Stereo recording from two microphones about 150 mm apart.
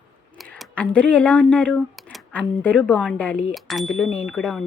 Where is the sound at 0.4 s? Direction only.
Centre (ahead or behind).